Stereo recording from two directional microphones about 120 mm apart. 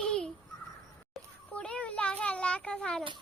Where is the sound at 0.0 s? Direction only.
5° left (ahead or behind).